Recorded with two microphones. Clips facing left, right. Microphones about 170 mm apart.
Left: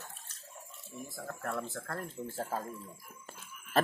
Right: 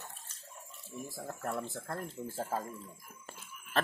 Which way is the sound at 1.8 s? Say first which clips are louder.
Even; 5° right (ahead or behind).